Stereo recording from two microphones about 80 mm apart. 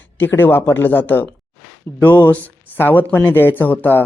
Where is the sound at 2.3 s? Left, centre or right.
Centre.